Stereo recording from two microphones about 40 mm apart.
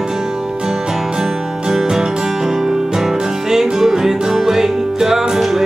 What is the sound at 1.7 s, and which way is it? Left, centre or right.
Music, centre.